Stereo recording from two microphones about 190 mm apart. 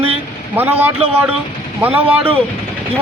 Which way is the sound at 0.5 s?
10° right (ahead or behind).